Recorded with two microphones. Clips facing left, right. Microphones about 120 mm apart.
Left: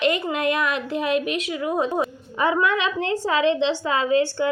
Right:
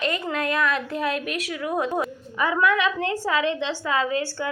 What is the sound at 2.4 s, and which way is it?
A woman's voice, 25° left (ahead or behind).